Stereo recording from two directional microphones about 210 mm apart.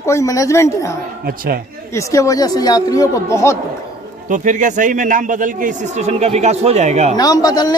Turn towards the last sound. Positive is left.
turn(degrees=15)  # may be behind; listen again after turning